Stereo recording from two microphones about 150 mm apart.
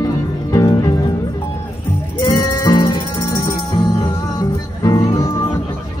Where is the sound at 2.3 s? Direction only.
25° left (ahead or behind).